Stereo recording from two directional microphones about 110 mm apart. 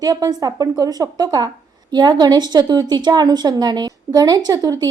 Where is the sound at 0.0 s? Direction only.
35° right (ahead or behind).